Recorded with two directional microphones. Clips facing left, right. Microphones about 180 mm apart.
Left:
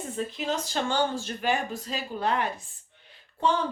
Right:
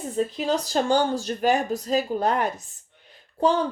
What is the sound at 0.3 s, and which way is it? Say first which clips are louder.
A woman's voice: right 4 dB; 35° right (ahead or behind).